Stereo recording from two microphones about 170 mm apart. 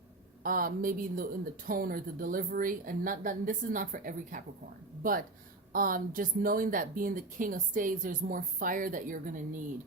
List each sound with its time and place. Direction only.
0.4 s a woman's voice: 55° right (ahead or behind)